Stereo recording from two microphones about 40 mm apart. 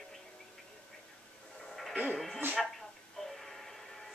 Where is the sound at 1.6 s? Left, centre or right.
Centre.